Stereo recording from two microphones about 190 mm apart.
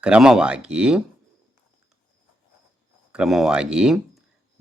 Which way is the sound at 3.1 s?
Centre (ahead or behind).